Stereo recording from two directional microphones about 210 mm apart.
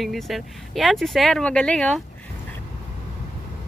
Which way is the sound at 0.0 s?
Centre (ahead or behind).